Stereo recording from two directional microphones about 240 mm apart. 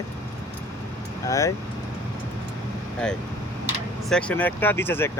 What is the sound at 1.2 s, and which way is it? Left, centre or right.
Speech, centre.